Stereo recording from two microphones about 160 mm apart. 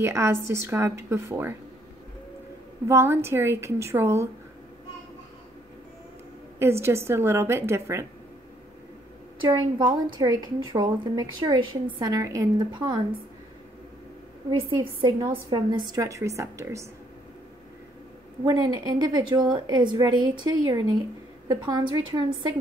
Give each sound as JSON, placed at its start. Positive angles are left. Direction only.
{"t": 0.0, "sound": "a woman's voice", "side_deg": -15}
{"t": 2.9, "sound": "a woman's voice", "side_deg": -15}
{"t": 6.6, "sound": "a woman's voice", "side_deg": -15}
{"t": 9.5, "sound": "a woman's voice", "side_deg": -25}
{"t": 14.6, "sound": "a woman's voice", "side_deg": -30}
{"t": 18.4, "sound": "a woman's voice", "side_deg": -25}